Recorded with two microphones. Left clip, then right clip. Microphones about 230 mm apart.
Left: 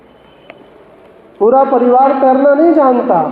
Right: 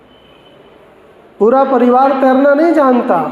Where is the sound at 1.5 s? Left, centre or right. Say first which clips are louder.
Left 1 dB; right.